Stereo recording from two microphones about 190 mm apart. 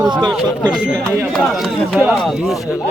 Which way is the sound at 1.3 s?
Centre (ahead or behind).